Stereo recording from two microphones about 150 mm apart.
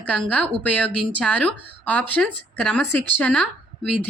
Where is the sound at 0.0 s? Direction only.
10° left (ahead or behind).